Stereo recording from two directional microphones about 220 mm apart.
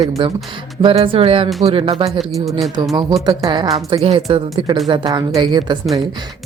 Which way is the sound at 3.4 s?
15° right (ahead or behind).